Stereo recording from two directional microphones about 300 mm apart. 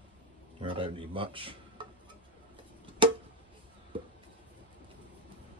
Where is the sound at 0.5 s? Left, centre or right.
Centre.